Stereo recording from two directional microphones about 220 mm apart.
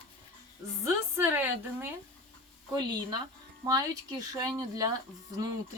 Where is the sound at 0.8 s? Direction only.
10° right (ahead or behind).